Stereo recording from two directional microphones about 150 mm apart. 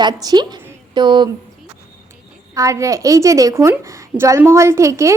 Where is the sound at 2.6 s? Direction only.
20° right (ahead or behind).